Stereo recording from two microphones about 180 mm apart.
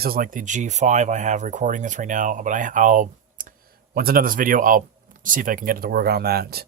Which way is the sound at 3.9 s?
55° right (ahead or behind).